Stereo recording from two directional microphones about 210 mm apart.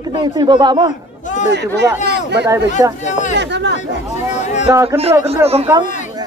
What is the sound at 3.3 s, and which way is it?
Speech, 55° right (ahead or behind).